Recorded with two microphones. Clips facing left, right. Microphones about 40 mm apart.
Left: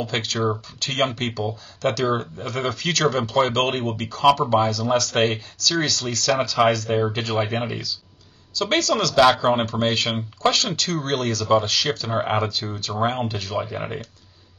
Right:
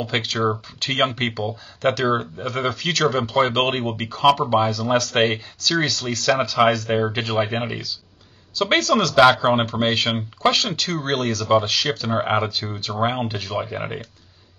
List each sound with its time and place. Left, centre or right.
0.0 s speech: centre
0.7 s speech: right; by 3.5 s centre
3.7 s speech: centre
12.4 s speech: centre